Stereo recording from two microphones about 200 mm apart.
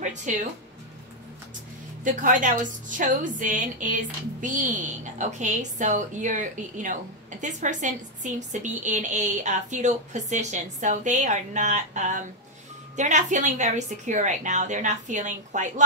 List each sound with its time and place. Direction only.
0.0 s music: 40° right (ahead or behind)
2.0 s a woman's voice: 40° right (ahead or behind)